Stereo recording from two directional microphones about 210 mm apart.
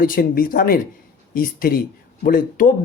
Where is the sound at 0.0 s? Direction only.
45° left (ahead or behind).